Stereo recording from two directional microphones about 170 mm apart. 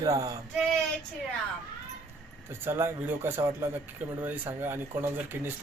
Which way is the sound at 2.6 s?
15° right (ahead or behind).